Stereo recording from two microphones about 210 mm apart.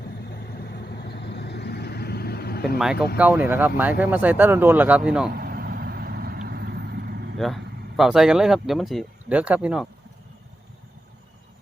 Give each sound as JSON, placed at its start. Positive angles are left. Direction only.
{"t": 0.2, "sound": "vehicle", "side_deg": 50}
{"t": 3.2, "sound": "speech", "side_deg": -10}
{"t": 5.3, "sound": "vehicle", "side_deg": -45}
{"t": 7.3, "sound": "speech", "side_deg": 0}